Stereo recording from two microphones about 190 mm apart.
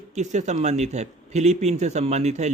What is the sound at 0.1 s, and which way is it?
A man's voice, 40° right (ahead or behind).